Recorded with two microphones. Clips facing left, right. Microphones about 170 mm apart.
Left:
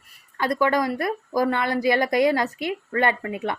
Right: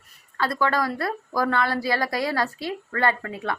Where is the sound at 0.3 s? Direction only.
20° left (ahead or behind).